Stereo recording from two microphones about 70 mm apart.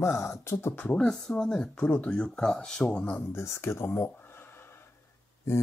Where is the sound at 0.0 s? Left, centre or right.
Left.